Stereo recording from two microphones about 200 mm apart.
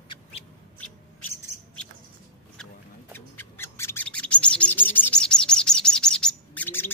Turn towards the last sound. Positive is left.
turn(degrees=10)  # may be behind; listen again after turning